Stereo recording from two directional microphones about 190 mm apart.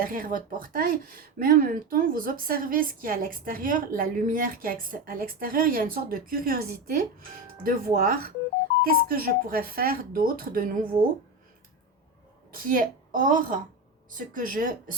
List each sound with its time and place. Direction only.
0.0 s speech: 45° right (ahead or behind)
12.5 s speech: 45° right (ahead or behind)